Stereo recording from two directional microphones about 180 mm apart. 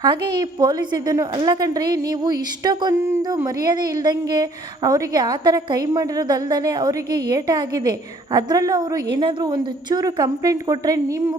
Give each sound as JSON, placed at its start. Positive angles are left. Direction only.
{"t": 0.0, "sound": "a woman's voice", "side_deg": -25}